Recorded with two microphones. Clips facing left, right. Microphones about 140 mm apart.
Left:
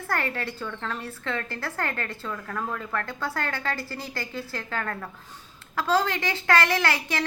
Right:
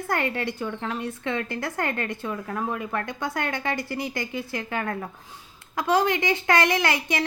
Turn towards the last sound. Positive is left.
turn(degrees=-15)  # may be behind; listen again after turning